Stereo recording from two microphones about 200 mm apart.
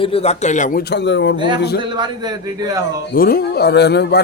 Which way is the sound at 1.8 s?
20° right (ahead or behind).